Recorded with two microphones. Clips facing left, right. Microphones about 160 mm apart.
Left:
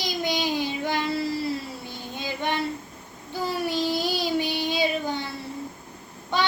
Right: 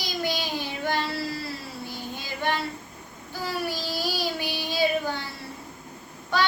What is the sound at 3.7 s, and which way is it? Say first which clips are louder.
Child singing: left 5 dB; 20° left (ahead or behind).